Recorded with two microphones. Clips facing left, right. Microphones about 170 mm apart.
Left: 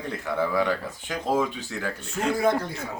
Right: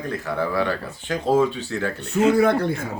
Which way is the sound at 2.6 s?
60° right (ahead or behind).